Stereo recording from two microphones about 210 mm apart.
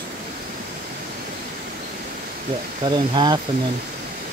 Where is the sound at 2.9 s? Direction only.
20° right (ahead or behind).